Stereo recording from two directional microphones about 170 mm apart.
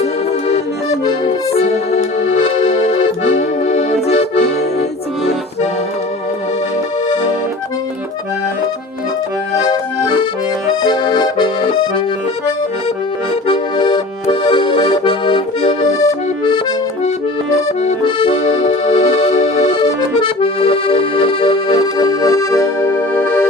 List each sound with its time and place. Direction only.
0.0 s accordion: 35° left (ahead or behind)
1.5 s music: 40° left (ahead or behind)
3.0 s accordion: 40° left (ahead or behind)
10.8 s accordion: 25° left (ahead or behind)
13.5 s accordion: 30° left (ahead or behind)
18.2 s accordion: 35° left (ahead or behind)
19.7 s accordion: 30° left (ahead or behind); by 23.5 s 10° left (ahead or behind)